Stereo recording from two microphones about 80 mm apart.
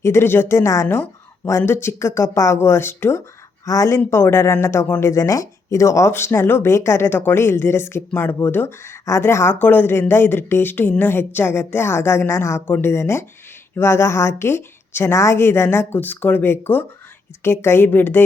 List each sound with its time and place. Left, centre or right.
0.0 s speech: left